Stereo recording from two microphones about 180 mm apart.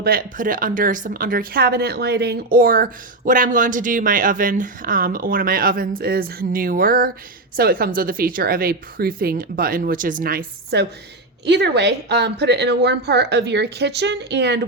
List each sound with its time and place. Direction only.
0.0 s a woman's voice: 55° right (ahead or behind); by 14.6 s 70° right (ahead or behind)